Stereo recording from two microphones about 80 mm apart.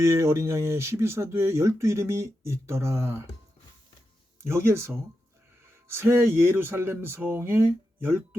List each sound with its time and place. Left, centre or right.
0.0 s speech: right
4.4 s speech: right
5.9 s speech: right